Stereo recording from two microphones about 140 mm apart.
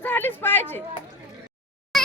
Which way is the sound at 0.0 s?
15° left (ahead or behind).